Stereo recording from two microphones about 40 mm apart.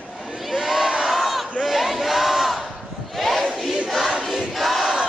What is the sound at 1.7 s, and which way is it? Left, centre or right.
Crowd, centre.